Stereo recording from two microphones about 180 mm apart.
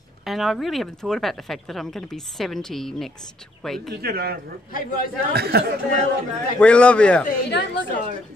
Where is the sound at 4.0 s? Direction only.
60° right (ahead or behind).